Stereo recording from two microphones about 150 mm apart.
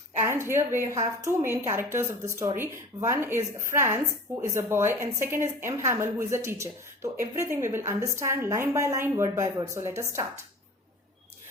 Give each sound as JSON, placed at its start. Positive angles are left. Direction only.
{"t": 0.3, "sound": "a woman's voice", "side_deg": -15}